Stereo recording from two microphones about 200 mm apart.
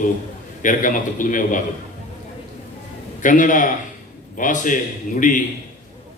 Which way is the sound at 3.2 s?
40° left (ahead or behind).